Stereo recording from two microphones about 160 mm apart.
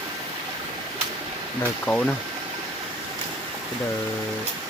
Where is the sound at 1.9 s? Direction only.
5° left (ahead or behind).